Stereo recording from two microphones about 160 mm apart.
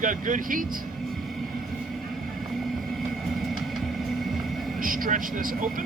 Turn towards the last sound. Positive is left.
turn(degrees=-60)  # may be behind; listen again after turning